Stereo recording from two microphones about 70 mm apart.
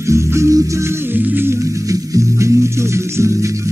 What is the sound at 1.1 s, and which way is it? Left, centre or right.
Music, right.